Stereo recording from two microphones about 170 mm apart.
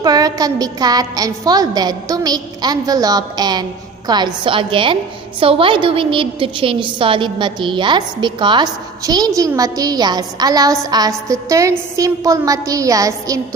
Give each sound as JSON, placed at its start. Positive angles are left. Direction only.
{"t": 0.0, "sound": "a woman's voice", "side_deg": -20}